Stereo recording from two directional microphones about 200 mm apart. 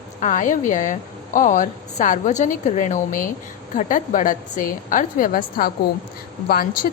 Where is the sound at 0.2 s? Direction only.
40° left (ahead or behind).